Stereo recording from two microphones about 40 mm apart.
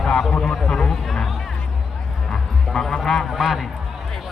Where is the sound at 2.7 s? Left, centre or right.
Left.